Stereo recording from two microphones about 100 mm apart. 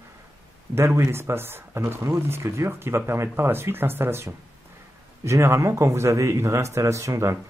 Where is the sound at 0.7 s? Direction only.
25° right (ahead or behind).